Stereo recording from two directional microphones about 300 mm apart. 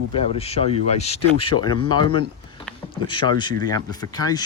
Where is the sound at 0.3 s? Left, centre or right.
Centre.